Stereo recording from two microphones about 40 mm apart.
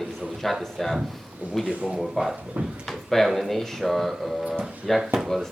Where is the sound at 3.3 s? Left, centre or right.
Centre.